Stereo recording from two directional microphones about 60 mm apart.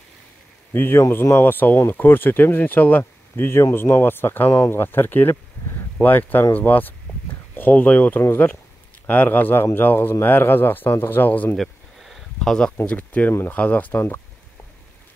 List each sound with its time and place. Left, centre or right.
0.7 s speech: left
11.5 s a sound: centre
12.8 s speech: left